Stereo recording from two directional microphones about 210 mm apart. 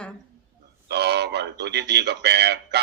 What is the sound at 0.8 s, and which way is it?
A man's voice, 50° right (ahead or behind).